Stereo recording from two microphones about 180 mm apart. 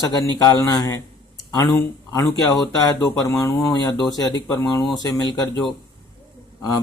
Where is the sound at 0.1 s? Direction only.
20° left (ahead or behind).